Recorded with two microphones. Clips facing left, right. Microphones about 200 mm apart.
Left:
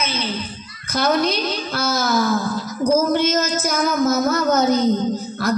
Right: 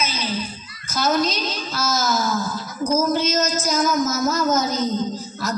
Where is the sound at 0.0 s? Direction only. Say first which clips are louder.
Left 2 dB; 60° left (ahead or behind).